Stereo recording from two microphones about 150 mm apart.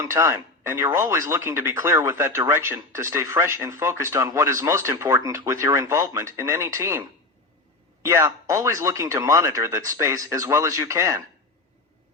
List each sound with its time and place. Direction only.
0.0 s speech: 20° right (ahead or behind)